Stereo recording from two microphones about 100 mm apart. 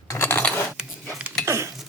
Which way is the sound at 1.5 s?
30° right (ahead or behind).